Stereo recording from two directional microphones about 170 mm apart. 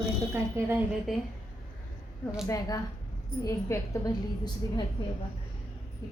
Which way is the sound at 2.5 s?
20° left (ahead or behind).